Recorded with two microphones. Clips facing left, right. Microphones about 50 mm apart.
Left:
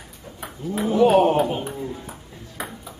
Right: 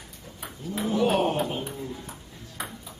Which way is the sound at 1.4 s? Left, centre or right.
Centre.